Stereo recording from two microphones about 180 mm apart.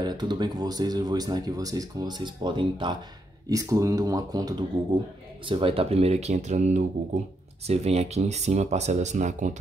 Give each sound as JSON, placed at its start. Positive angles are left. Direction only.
{"t": 0.0, "sound": "speech", "side_deg": -25}